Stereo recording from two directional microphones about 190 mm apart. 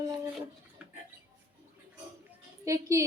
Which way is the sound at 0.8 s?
5° right (ahead or behind).